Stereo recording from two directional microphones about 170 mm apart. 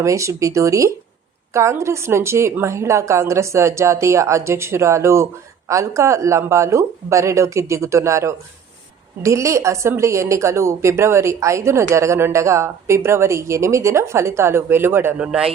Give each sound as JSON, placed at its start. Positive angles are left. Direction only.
{"t": 0.0, "sound": "a woman's voice", "side_deg": -20}